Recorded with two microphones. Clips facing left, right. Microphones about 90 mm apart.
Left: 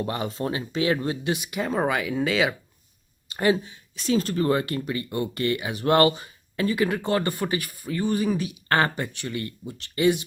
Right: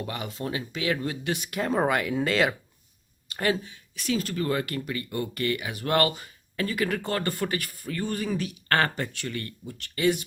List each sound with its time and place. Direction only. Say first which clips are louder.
0.0 s speech: left 5 dB; 30° left (ahead or behind)
1.4 s speech: even; 5° left (ahead or behind)
3.2 s speech: left 4 dB; 20° left (ahead or behind)